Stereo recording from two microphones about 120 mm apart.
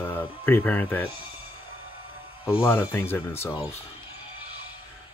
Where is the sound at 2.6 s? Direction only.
20° left (ahead or behind).